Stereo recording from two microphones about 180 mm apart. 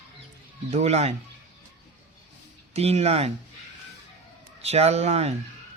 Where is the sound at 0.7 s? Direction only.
35° right (ahead or behind).